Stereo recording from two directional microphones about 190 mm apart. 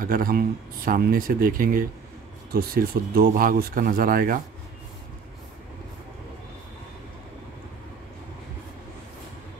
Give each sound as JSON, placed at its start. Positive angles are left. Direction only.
{"t": 0.0, "sound": "speech", "side_deg": -50}